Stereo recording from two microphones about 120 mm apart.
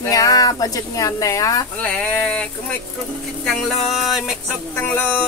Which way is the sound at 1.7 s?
15° left (ahead or behind).